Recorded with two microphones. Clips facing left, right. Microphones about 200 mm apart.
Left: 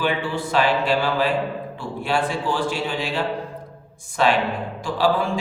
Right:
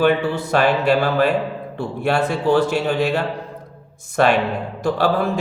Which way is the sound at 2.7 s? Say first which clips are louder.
Right 6 dB; 60° right (ahead or behind).